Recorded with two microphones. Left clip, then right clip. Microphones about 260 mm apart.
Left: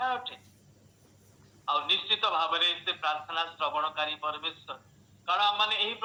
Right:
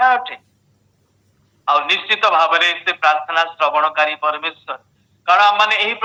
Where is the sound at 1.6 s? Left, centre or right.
Right.